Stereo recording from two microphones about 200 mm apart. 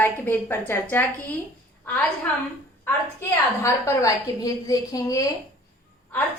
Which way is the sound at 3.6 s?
15° left (ahead or behind).